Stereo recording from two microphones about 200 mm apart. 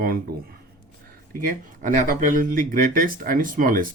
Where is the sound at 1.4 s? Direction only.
40° right (ahead or behind).